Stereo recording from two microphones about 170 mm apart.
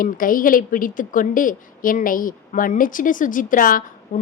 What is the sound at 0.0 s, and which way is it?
A woman's voice, 55° left (ahead or behind).